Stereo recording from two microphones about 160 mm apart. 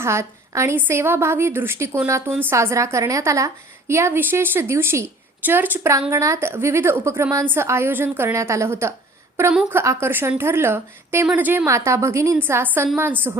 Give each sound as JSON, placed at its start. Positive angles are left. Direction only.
{"t": 0.0, "sound": "a woman's voice", "side_deg": -15}